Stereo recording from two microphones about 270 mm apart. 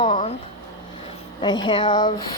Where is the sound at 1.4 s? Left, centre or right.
Centre.